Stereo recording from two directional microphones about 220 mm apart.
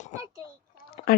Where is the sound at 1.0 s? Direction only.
30° left (ahead or behind).